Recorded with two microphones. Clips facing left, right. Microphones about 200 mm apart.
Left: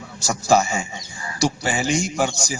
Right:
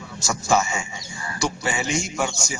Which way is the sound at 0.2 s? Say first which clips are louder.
Left 3 dB; 35° left (ahead or behind).